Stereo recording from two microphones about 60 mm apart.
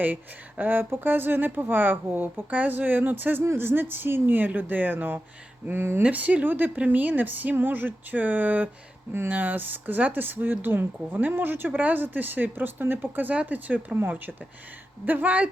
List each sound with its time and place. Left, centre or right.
0.0 s speech: right
6.0 s speech: right